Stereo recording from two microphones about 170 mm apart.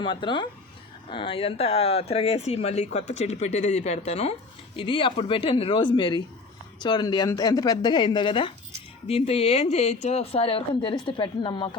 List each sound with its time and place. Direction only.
0.0 s speech: 30° left (ahead or behind)